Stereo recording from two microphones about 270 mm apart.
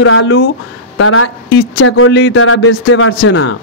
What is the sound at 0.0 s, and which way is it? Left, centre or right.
Speech, left.